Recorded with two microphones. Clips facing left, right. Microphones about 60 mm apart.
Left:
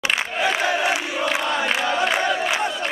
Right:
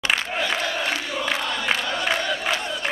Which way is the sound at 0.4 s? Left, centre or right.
Centre.